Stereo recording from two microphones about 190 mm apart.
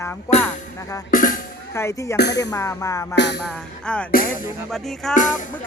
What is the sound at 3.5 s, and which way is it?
Speech, 5° left (ahead or behind).